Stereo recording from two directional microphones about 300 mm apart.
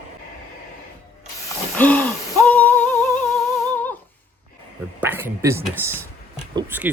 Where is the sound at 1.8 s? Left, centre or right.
Centre.